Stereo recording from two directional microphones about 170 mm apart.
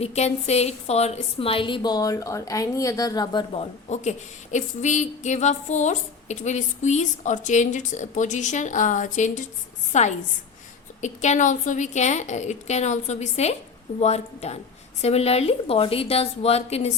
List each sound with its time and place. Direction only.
0.0 s a woman's voice: 40° left (ahead or behind)
4.5 s a sound: 45° left (ahead or behind)
14.0 s a woman's voice: 40° left (ahead or behind)